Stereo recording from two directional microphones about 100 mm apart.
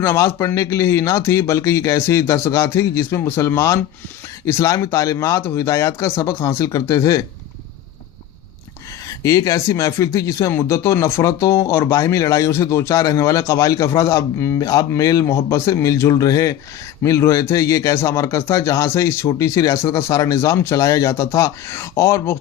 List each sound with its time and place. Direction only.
0.0 s a man's voice: 25° left (ahead or behind)
9.0 s a man's voice: 35° left (ahead or behind)